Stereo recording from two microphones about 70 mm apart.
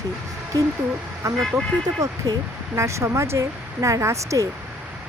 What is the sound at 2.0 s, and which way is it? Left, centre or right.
Speech, right.